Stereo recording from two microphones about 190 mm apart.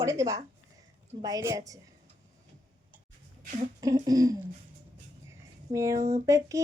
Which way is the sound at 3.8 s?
20° right (ahead or behind).